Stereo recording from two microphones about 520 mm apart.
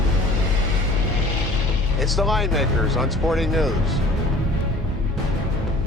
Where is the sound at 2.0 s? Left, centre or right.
Centre.